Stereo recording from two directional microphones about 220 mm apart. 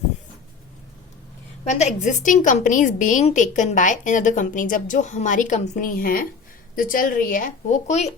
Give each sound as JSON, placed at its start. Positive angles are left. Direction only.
{"t": 1.6, "sound": "a woman's voice", "side_deg": 35}